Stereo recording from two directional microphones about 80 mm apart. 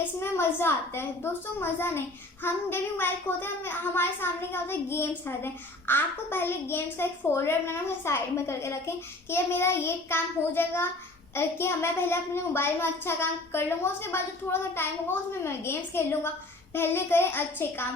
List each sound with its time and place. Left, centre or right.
0.0 s a woman's voice: left